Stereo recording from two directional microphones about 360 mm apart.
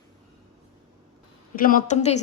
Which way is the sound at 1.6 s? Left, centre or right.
Left.